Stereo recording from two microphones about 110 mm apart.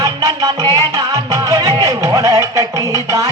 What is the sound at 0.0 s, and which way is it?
Music, 35° right (ahead or behind).